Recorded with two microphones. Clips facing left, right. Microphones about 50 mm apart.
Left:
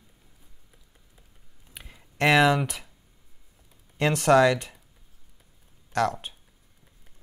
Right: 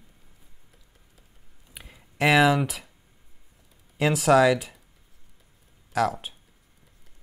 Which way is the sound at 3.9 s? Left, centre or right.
Centre.